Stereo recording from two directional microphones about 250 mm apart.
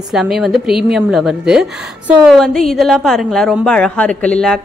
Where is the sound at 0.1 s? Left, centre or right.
Centre.